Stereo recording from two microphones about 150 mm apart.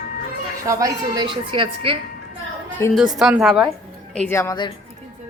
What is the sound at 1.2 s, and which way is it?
Speech, 35° right (ahead or behind).